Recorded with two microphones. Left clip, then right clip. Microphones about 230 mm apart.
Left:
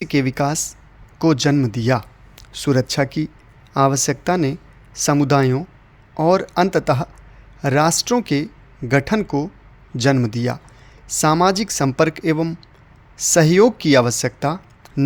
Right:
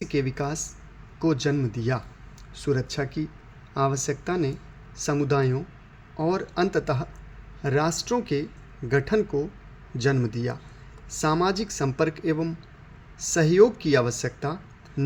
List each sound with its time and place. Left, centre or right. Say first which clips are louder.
0.0 s speech: left 8 dB; left